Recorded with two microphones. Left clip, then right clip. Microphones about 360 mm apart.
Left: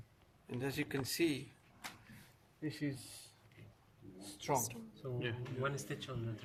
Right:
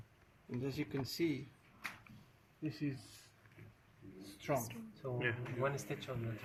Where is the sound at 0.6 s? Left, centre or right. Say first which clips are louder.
Left 2 dB; left.